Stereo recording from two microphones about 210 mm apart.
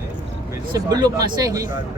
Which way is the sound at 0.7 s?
20° right (ahead or behind).